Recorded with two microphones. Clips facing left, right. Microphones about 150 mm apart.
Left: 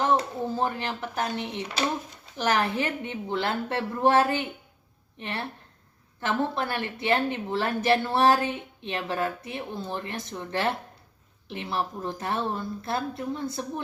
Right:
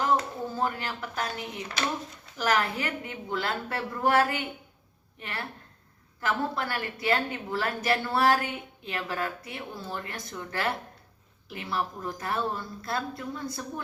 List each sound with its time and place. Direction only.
0.0 s a woman's voice: 25° left (ahead or behind)